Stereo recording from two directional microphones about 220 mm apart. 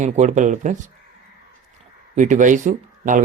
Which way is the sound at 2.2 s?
35° right (ahead or behind).